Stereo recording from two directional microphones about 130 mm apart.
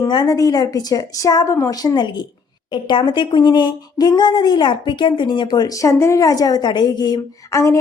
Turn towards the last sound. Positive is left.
turn(degrees=20)  # may be behind; listen again after turning